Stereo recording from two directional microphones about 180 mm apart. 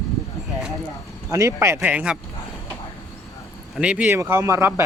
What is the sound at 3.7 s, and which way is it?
Speech, 5° right (ahead or behind).